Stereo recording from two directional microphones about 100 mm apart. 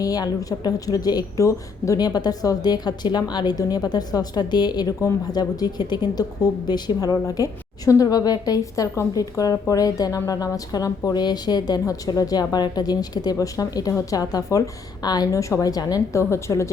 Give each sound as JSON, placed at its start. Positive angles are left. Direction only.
{"t": 0.0, "sound": "a woman's voice", "side_deg": 40}